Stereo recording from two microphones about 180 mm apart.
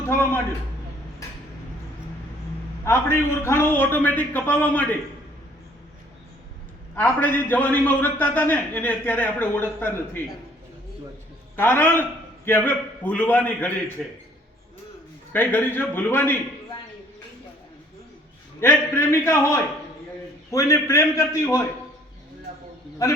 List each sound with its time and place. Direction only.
0.0 s a sound: 10° left (ahead or behind)
2.9 s a man's voice: 15° left (ahead or behind)
6.9 s a man's voice: 10° left (ahead or behind)
11.5 s a man's voice: 10° left (ahead or behind)
15.3 s a man's voice: 10° left (ahead or behind)
18.6 s a man's voice: 15° left (ahead or behind)
23.0 s a man's voice: 15° left (ahead or behind)